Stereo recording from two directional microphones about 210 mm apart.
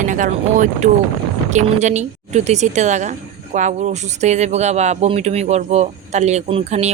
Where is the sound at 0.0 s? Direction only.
35° right (ahead or behind).